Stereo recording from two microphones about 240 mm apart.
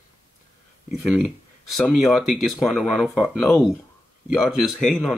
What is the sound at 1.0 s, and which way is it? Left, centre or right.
Speech, centre.